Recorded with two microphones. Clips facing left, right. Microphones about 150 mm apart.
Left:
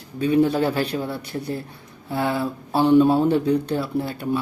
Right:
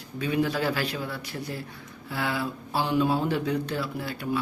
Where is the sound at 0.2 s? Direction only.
30° left (ahead or behind).